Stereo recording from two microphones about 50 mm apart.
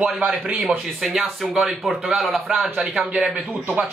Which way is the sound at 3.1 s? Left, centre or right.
Centre.